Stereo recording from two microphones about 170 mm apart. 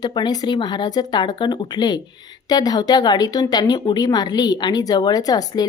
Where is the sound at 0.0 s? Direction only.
25° left (ahead or behind).